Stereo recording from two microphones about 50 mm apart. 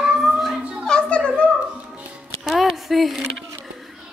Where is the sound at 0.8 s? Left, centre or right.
Centre.